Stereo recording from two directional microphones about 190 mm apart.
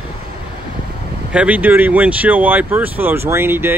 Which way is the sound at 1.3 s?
5° right (ahead or behind).